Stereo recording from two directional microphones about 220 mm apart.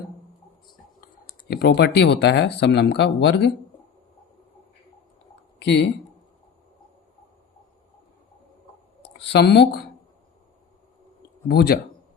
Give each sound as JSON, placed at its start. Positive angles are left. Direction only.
{"t": 1.5, "sound": "speech", "side_deg": 50}
{"t": 5.5, "sound": "speech", "side_deg": 50}
{"t": 9.0, "sound": "speech", "side_deg": 50}
{"t": 11.4, "sound": "speech", "side_deg": 45}